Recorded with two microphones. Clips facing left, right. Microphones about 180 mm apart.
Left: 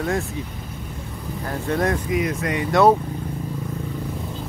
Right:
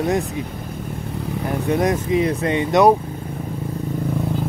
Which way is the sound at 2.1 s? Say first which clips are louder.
Right 4 dB; 30° right (ahead or behind).